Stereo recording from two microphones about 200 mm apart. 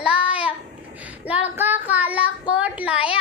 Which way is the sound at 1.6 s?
10° right (ahead or behind).